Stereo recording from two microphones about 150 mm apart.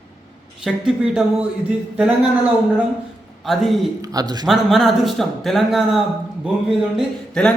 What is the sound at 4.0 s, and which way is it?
Speech, 25° right (ahead or behind).